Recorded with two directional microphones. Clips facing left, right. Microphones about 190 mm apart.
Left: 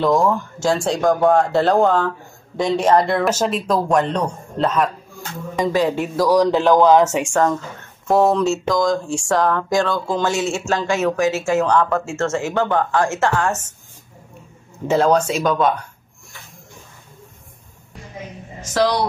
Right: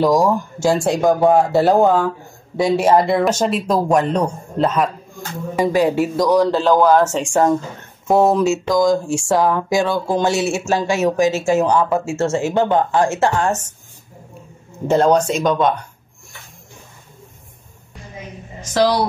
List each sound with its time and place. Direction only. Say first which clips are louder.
0.0 s speech: right 2 dB; 5° right (ahead or behind)
5.6 s speech: right 3 dB; 10° right (ahead or behind)
6.2 s speech: left 1 dB; 10° left (ahead or behind)
8.1 s speech: right 1 dB; 5° right (ahead or behind); by 13.6 s 20° right (ahead or behind)
14.9 s speech: right 2 dB; centre (ahead or behind)
18.7 s speech: right 2 dB; 5° right (ahead or behind)